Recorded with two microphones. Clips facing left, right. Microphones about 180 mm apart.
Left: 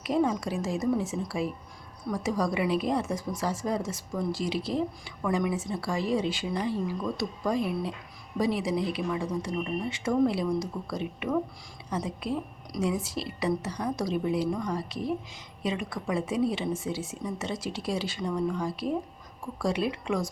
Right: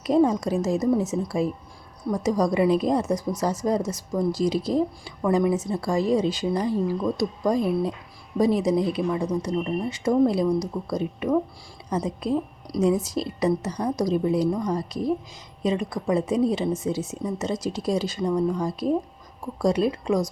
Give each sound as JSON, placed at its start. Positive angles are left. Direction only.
{"t": 0.0, "sound": "a woman's voice", "side_deg": -40}